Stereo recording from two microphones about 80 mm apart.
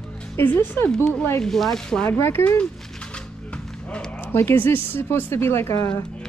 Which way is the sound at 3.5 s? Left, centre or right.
Centre.